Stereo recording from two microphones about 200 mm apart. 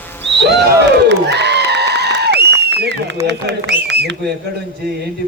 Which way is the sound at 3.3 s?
60° right (ahead or behind).